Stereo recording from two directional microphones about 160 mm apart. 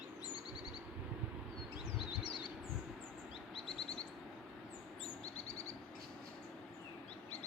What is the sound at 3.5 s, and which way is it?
Bird, 35° left (ahead or behind).